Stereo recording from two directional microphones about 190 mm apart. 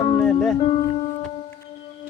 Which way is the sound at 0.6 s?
30° left (ahead or behind).